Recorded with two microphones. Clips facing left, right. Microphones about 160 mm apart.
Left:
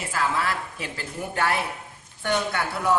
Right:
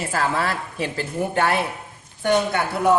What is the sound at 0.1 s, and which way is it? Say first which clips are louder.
A woman's voice: right 1 dB; 35° right (ahead or behind).